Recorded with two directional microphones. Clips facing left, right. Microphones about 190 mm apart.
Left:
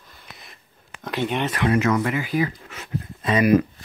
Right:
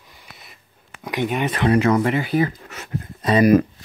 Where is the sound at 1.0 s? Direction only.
10° right (ahead or behind).